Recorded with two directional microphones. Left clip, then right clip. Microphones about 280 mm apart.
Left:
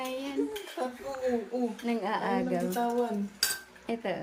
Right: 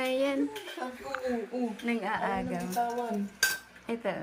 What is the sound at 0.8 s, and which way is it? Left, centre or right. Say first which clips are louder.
Speech: left 4 dB; left.